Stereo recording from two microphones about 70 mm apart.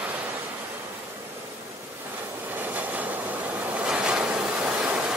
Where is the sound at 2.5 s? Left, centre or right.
Right.